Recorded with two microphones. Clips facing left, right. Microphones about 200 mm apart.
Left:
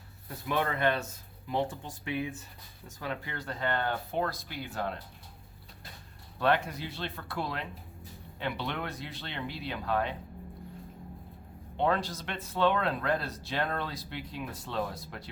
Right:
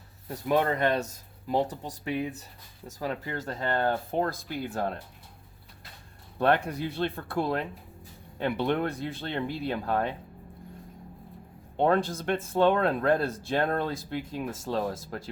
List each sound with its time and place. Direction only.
0.3 s speech: 40° right (ahead or behind)
6.7 s speech: 50° right (ahead or behind)
11.8 s speech: 50° right (ahead or behind)